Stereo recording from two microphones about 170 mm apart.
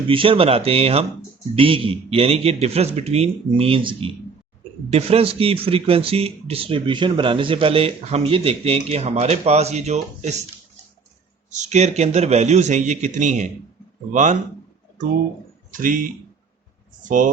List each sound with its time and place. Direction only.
0.1 s speech: 30° right (ahead or behind)
11.5 s a man's voice: 45° right (ahead or behind)
15.7 s a man's voice: 50° right (ahead or behind)